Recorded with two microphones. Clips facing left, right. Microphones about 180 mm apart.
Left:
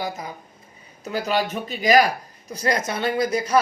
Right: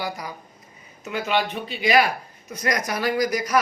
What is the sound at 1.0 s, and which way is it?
A woman's voice, 40° left (ahead or behind).